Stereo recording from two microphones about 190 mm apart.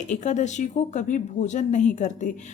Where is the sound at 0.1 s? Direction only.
40° left (ahead or behind).